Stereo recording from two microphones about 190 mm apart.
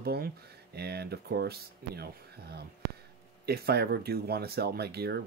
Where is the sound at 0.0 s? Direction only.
55° right (ahead or behind).